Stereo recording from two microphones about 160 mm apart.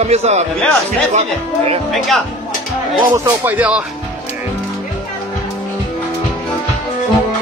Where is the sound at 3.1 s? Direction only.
15° right (ahead or behind).